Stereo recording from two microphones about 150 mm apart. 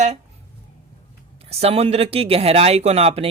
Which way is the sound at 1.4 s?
45° right (ahead or behind).